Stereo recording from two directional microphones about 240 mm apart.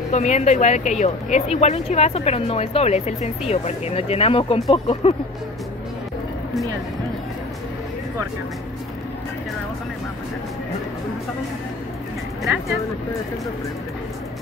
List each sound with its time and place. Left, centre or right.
0.1 s speech: left